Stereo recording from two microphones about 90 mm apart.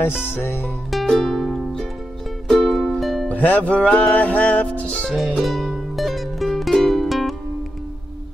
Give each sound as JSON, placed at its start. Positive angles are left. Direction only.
{"t": 0.4, "sound": "music", "side_deg": 25}
{"t": 0.8, "sound": "music", "side_deg": 5}
{"t": 3.3, "sound": "music", "side_deg": 15}
{"t": 5.3, "sound": "music", "side_deg": 0}